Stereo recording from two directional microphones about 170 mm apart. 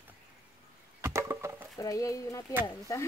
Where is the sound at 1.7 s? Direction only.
20° left (ahead or behind).